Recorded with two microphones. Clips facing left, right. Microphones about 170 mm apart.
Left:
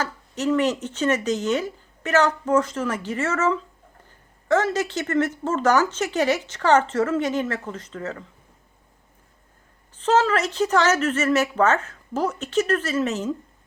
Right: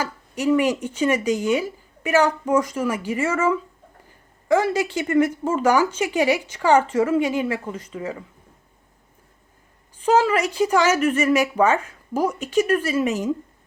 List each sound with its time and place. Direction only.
0.0 s speech: 10° right (ahead or behind)
10.0 s speech: 10° right (ahead or behind)